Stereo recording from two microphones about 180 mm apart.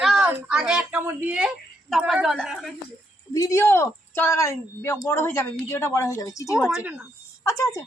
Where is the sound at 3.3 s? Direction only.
15° left (ahead or behind).